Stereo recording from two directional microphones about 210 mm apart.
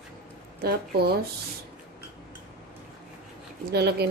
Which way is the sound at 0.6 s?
50° right (ahead or behind).